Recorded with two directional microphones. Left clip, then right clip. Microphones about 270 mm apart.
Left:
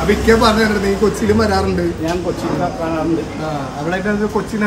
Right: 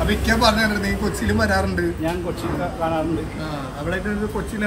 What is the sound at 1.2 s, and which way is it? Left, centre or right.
Speech, centre.